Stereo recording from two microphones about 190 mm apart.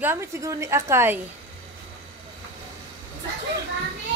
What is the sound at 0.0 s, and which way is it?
Speech, 15° right (ahead or behind).